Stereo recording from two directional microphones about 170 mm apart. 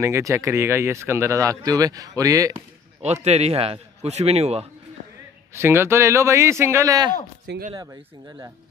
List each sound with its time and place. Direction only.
0.0 s speech: 15° right (ahead or behind)
3.0 s a man's voice: 40° right (ahead or behind)
5.5 s speech: 15° right (ahead or behind)